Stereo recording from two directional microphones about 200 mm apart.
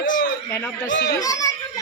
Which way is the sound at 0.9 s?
65° left (ahead or behind).